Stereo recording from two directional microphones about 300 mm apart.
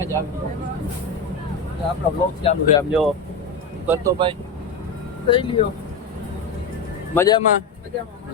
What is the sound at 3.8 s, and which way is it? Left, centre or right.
Speech, centre.